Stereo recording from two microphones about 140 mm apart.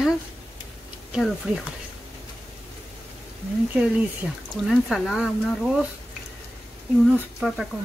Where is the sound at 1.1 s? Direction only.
Centre (ahead or behind).